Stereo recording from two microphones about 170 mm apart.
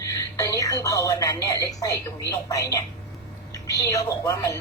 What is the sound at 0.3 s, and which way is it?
Speech, 20° left (ahead or behind).